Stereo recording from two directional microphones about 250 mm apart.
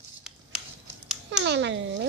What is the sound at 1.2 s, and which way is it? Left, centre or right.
Speech, right.